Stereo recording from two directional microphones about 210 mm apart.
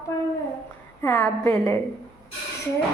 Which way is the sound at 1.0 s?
5° left (ahead or behind).